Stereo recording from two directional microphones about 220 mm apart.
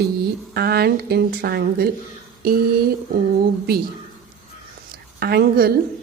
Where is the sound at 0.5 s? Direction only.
45° right (ahead or behind).